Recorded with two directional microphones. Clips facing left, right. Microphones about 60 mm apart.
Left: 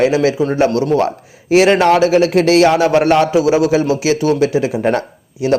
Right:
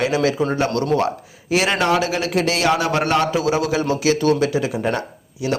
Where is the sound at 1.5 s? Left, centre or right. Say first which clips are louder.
Left 8 dB; left.